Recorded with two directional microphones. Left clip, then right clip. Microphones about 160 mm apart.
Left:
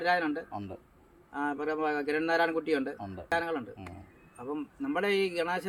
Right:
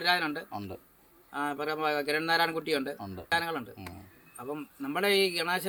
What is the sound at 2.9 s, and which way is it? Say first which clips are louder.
Speech: even; 25° left (ahead or behind).